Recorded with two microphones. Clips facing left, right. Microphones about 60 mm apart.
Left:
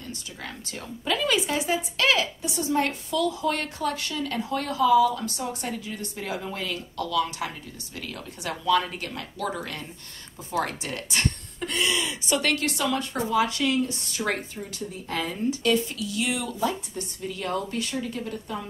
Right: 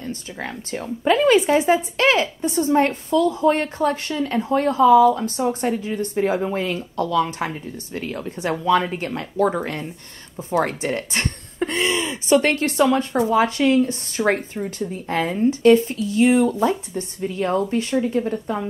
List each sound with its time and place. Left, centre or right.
0.0 s speech: right